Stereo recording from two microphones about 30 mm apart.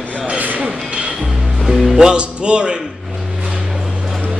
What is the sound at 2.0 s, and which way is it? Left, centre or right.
Speech, right.